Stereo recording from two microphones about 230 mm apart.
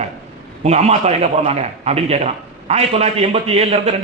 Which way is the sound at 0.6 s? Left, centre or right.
Right.